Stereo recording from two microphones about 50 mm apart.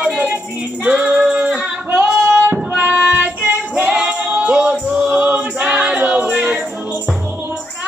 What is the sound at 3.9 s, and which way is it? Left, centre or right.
Music, right.